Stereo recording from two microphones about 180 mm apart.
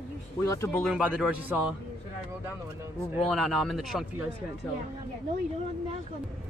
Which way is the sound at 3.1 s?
Centre (ahead or behind).